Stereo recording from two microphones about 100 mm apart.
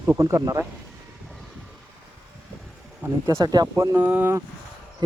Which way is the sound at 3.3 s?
40° right (ahead or behind).